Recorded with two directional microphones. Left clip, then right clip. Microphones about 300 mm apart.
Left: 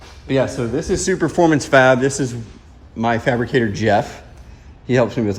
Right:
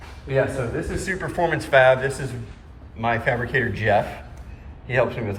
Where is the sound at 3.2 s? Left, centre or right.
Left.